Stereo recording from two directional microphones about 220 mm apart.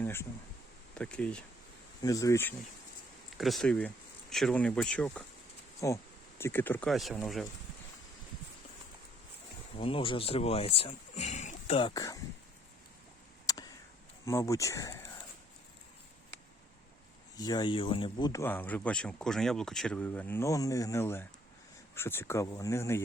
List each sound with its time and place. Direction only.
0.0 s a sound: 10° left (ahead or behind)
0.9 s speech: 5° left (ahead or behind)
2.0 s speech: 15° left (ahead or behind)
3.3 s speech: centre (ahead or behind)
9.7 s speech: 25° left (ahead or behind)
11.9 s speech: 15° left (ahead or behind)
13.5 s a sound: 15° left (ahead or behind)
14.3 s speech: 15° left (ahead or behind)
17.3 s speech: 20° left (ahead or behind)